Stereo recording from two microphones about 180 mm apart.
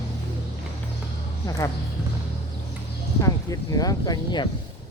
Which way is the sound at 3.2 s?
20° left (ahead or behind).